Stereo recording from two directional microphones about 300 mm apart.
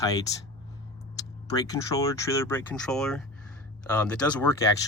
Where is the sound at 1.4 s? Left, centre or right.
Centre.